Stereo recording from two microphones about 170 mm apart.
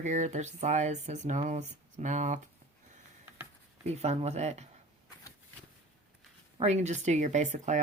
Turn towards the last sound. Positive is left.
turn(degrees=-45)  # may be behind; listen again after turning